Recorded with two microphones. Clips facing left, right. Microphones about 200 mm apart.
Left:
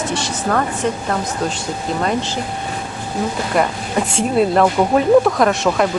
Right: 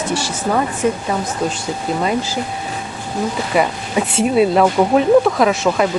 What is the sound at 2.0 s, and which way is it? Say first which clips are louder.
Speech: even; 5° right (ahead or behind).